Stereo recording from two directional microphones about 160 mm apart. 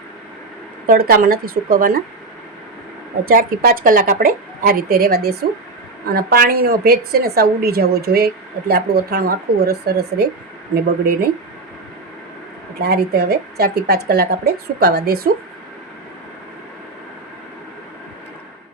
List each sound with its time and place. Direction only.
0.9 s speech: 70° right (ahead or behind)
3.2 s a woman's voice: 65° right (ahead or behind); by 10.2 s 85° right
12.8 s speech: 80° right